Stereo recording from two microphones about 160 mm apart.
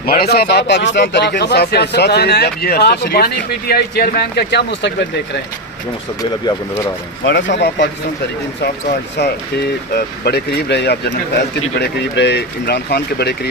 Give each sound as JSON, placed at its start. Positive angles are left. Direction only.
{"t": 0.0, "sound": "speech", "side_deg": 75}
{"t": 7.3, "sound": "speech", "side_deg": 90}